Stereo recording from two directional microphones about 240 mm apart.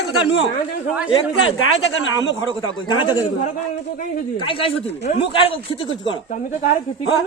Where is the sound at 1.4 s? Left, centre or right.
Left.